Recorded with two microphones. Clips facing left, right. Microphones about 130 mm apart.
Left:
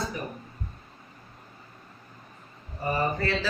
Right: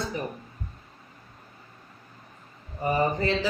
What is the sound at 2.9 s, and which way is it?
Speech, 20° right (ahead or behind).